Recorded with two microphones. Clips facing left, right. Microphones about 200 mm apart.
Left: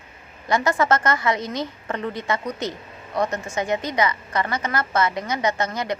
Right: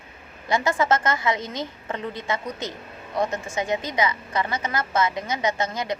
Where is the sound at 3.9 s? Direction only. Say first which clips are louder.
Left 2 dB; 20° right (ahead or behind).